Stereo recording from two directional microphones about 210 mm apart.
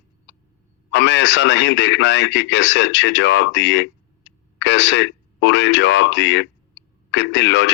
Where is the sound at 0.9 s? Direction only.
60° left (ahead or behind).